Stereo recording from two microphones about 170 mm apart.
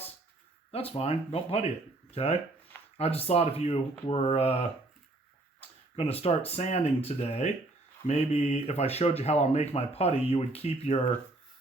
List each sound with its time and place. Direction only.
0.7 s speech: 35° left (ahead or behind)